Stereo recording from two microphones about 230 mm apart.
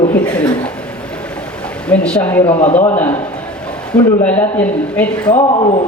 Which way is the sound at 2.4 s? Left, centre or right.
Left.